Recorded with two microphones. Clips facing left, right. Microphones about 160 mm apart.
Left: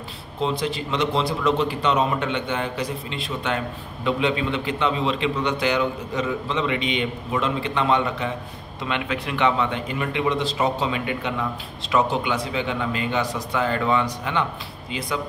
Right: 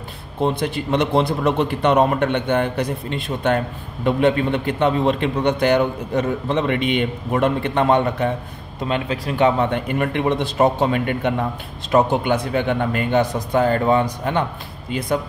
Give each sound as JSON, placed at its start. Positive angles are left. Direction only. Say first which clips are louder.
{"t": 0.4, "sound": "a man's voice", "louder": "right 4 dB", "side_deg": -55}
{"t": 8.8, "sound": "a man's voice", "louder": "right 4 dB", "side_deg": -40}